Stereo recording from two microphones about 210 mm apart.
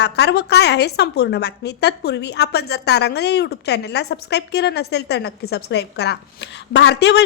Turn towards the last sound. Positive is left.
turn(degrees=55)  # may be behind; listen again after turning